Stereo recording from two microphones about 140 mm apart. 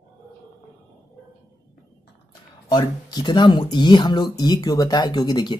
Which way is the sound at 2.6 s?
25° left (ahead or behind).